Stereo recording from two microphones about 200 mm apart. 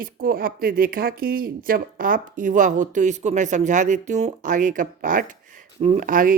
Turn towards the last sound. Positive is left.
turn(degrees=-45)  # may be behind; listen again after turning